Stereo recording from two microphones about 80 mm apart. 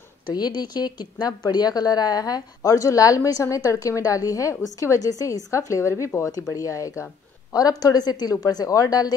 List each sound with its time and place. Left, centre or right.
0.3 s speech: left